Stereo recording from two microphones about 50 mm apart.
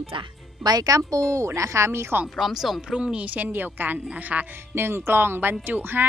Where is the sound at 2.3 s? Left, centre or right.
Centre; by 4.5 s right.